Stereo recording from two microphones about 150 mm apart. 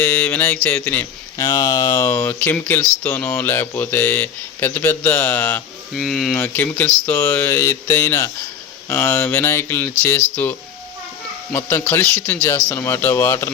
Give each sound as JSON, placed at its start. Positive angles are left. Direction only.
{"t": 0.0, "sound": "speech", "side_deg": 10}
{"t": 1.4, "sound": "speech", "side_deg": 25}
{"t": 5.9, "sound": "speech", "side_deg": 0}
{"t": 6.3, "sound": "speech", "side_deg": 15}
{"t": 11.5, "sound": "speech", "side_deg": 15}